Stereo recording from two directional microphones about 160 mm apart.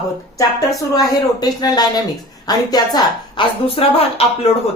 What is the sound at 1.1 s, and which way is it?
A woman's voice, 25° left (ahead or behind).